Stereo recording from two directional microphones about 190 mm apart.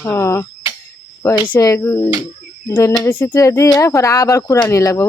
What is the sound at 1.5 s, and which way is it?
Speech, 15° left (ahead or behind).